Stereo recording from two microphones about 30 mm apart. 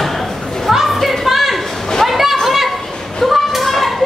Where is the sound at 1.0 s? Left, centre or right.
Centre.